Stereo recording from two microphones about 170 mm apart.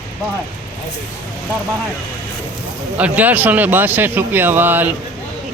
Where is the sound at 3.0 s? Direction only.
10° right (ahead or behind).